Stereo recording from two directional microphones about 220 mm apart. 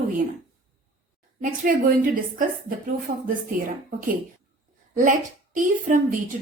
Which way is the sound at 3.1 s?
40° right (ahead or behind).